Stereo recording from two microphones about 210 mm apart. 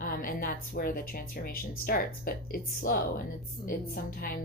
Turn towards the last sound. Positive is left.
turn(degrees=45)  # may be behind; listen again after turning